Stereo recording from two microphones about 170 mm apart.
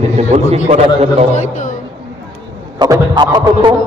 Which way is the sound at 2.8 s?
25° right (ahead or behind).